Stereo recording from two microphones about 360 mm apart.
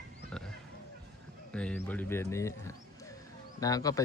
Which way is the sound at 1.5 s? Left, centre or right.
Centre.